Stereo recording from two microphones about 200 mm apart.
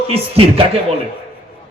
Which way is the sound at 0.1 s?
30° right (ahead or behind).